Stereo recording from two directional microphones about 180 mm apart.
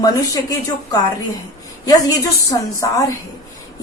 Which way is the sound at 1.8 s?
20° left (ahead or behind).